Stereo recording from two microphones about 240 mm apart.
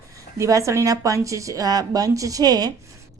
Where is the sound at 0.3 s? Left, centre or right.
Centre.